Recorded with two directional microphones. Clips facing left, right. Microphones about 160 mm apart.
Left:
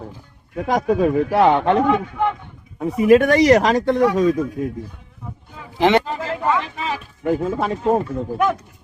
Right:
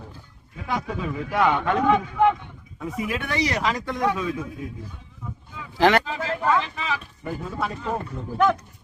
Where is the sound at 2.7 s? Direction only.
40° left (ahead or behind).